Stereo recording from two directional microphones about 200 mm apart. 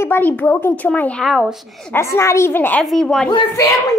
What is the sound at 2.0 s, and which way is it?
A woman's voice, 15° left (ahead or behind).